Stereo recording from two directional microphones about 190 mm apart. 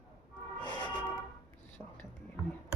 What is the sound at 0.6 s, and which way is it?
Music, 25° left (ahead or behind).